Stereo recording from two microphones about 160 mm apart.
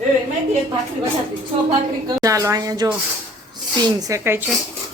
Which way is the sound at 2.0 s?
20° right (ahead or behind).